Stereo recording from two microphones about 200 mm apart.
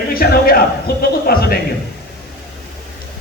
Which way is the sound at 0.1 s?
50° left (ahead or behind).